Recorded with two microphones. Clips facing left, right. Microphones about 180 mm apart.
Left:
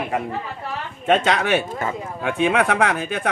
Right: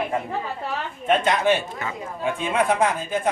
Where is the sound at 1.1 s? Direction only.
75° left (ahead or behind).